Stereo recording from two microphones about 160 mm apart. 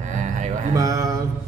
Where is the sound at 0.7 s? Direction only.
20° right (ahead or behind).